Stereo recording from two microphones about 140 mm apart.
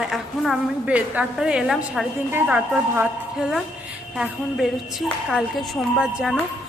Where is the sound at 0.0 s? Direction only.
Centre (ahead or behind).